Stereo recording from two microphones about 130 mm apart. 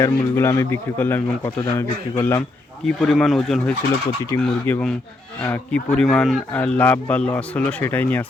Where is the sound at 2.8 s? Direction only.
5° left (ahead or behind).